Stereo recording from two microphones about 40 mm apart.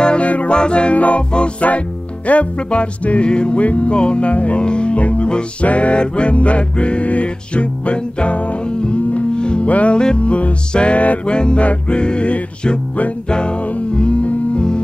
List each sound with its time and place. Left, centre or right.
0.0 s music: left
0.9 s music: left
9.7 s music: left
13.3 s music: left